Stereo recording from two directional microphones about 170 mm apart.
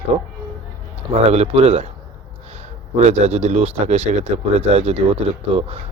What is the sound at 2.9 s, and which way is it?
Speech, 40° right (ahead or behind).